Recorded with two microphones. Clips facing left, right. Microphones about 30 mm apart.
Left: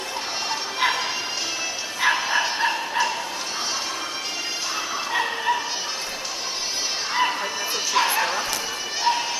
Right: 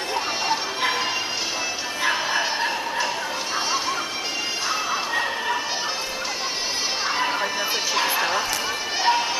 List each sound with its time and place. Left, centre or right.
2.0 s bow-wow: centre
7.9 s bow-wow: centre
9.1 s run: centre